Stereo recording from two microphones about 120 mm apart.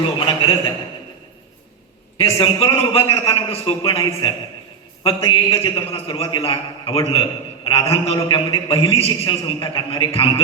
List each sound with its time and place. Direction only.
0.3 s a man's voice: 45° left (ahead or behind)
2.1 s a man's voice: 50° left (ahead or behind)